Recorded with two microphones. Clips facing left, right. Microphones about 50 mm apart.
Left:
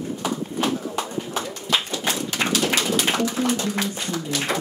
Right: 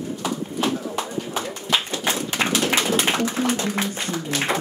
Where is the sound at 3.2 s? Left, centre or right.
Right.